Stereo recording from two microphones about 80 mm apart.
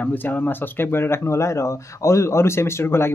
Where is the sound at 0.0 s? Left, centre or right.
Left.